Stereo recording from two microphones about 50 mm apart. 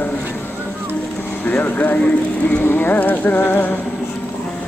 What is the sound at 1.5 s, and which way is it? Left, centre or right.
Music, left.